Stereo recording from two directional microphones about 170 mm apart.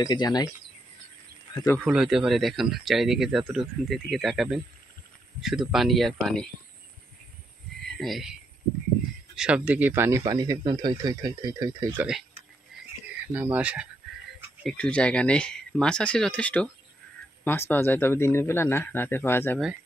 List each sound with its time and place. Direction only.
0.0 s speech: 25° left (ahead or behind)
1.5 s speech: 20° left (ahead or behind)
1.9 s speech: 5° right (ahead or behind)
7.8 s speech: centre (ahead or behind); by 11.9 s 20° right (ahead or behind)
12.0 s speech: 5° right (ahead or behind)
13.3 s speech: 10° right (ahead or behind)
14.6 s speech: 5° left (ahead or behind)